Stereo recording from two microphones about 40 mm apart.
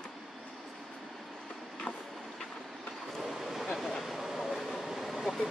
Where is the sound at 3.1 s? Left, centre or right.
Centre.